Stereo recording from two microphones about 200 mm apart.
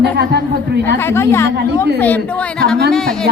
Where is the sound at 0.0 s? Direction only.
55° right (ahead or behind).